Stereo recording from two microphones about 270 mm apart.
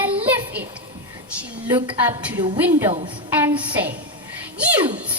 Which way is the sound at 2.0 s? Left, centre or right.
Centre.